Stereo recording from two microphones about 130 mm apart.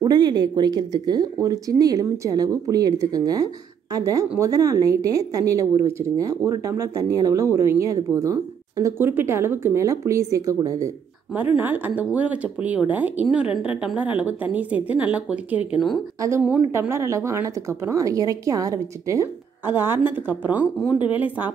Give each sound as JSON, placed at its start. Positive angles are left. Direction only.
{"t": 0.0, "sound": "speech", "side_deg": -35}
{"t": 11.5, "sound": "a woman's voice", "side_deg": -15}
{"t": 16.2, "sound": "speech", "side_deg": -20}